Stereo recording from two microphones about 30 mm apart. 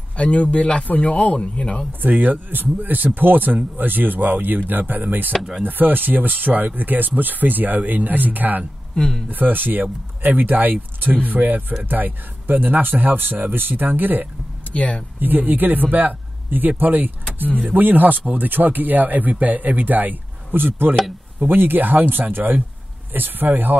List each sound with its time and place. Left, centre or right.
0.2 s speech: left
0.8 s speech: left
2.0 s speech: right
9.0 s speech: left
9.3 s speech: right
14.7 s speech: left
15.1 s speech: right
20.8 s speech: right